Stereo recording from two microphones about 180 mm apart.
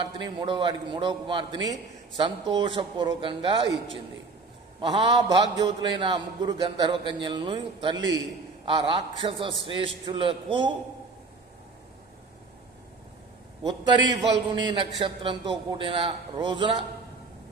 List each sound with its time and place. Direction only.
0.0 s a man's voice: 25° right (ahead or behind)
4.7 s a man's voice: 25° right (ahead or behind)
13.7 s a man's voice: 25° right (ahead or behind)